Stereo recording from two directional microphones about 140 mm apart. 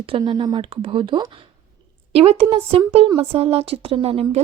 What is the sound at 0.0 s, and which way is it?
A woman's voice, 35° right (ahead or behind).